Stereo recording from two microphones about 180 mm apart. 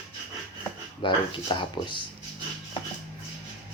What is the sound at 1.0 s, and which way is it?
Speech, 25° left (ahead or behind).